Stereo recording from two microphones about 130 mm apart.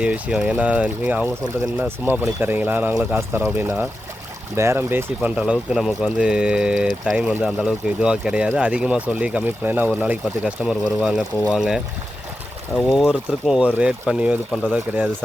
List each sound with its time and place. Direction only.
0.0 s speech: 10° right (ahead or behind)
5.4 s speech: 5° right (ahead or behind)